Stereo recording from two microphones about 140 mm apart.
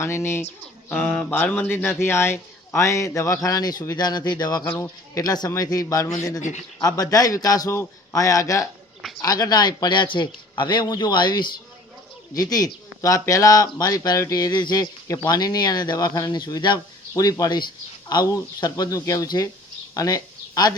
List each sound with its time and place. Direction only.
0.0 s speech: 20° left (ahead or behind)
6.4 s speech: 60° left (ahead or behind)
6.8 s a man's voice: 25° left (ahead or behind)
19.9 s a sound: 25° left (ahead or behind)